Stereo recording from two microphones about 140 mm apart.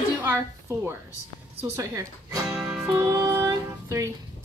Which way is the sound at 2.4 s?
5° right (ahead or behind).